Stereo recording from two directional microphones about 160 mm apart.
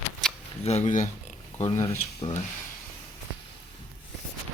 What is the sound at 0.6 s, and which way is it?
Speech, 40° left (ahead or behind).